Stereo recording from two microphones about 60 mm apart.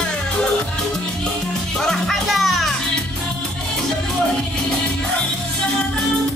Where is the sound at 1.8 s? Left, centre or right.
Centre.